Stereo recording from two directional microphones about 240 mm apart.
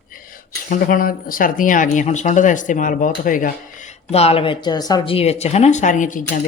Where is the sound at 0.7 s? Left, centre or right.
Left.